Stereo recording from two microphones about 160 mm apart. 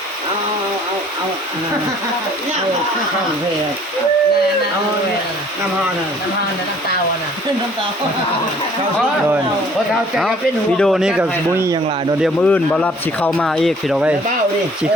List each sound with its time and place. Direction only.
10.8 s speech: centre (ahead or behind)
11.5 s speech: 15° right (ahead or behind)
12.2 s speech: 5° left (ahead or behind)